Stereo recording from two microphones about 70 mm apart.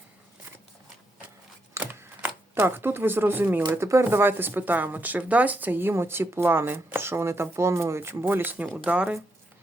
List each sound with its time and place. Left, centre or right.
1.8 s a sound: right
2.6 s speech: right
8.4 s speech: right